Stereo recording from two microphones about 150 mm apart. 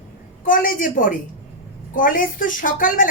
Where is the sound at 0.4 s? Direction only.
65° left (ahead or behind).